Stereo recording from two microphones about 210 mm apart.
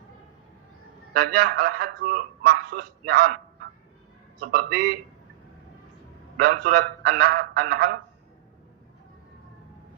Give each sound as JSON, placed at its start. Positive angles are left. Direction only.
{"t": 1.1, "sound": "a man's voice", "side_deg": -45}
{"t": 4.4, "sound": "a man's voice", "side_deg": -45}
{"t": 6.4, "sound": "a man's voice", "side_deg": -45}